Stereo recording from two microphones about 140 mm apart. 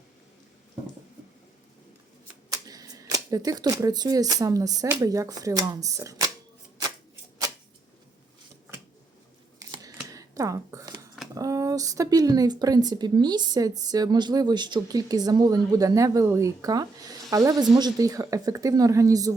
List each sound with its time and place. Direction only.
2.5 s speech: 25° right (ahead or behind)
9.6 s camera: 25° right (ahead or behind)
11.3 s speech: 25° right (ahead or behind)